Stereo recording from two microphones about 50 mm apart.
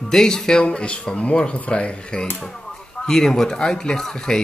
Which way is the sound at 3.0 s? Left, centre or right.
Centre.